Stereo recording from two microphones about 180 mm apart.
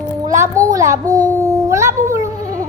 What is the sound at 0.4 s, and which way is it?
Child singing, 20° right (ahead or behind).